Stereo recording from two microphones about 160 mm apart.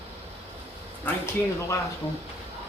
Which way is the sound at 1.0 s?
15° left (ahead or behind).